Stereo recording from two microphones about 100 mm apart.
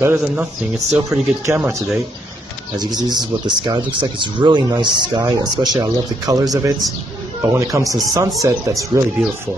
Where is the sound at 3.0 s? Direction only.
45° right (ahead or behind).